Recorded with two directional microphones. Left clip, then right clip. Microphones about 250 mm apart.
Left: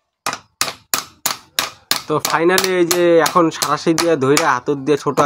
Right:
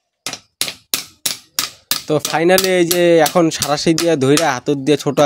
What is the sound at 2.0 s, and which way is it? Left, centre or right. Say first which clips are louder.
Speech: right 2 dB; right.